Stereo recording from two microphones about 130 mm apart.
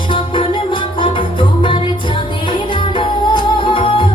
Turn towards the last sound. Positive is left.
turn(degrees=40)  # may be behind; listen again after turning